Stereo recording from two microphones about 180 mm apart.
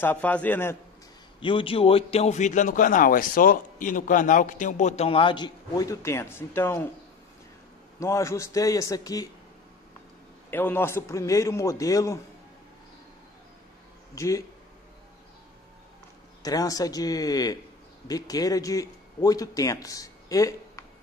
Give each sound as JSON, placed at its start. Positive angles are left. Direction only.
{"t": 0.0, "sound": "a man's voice", "side_deg": 10}
{"t": 1.4, "sound": "speech", "side_deg": 30}
{"t": 8.0, "sound": "a man's voice", "side_deg": 15}
{"t": 10.5, "sound": "a man's voice", "side_deg": 10}
{"t": 14.1, "sound": "speech", "side_deg": 15}
{"t": 16.4, "sound": "a man's voice", "side_deg": 20}